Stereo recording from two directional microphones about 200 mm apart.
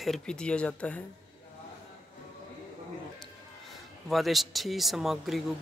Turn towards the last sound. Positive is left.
turn(degrees=0)  # may be behind; listen again after turning